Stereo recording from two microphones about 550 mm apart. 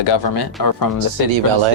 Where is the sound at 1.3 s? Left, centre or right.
Right.